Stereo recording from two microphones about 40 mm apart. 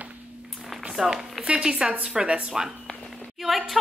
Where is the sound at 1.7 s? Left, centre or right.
Right.